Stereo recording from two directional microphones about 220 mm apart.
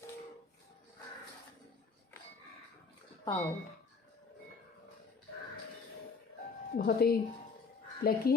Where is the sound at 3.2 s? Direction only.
15° left (ahead or behind).